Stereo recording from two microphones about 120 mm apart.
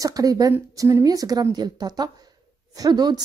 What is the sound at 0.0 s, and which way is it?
A woman's voice, 30° right (ahead or behind).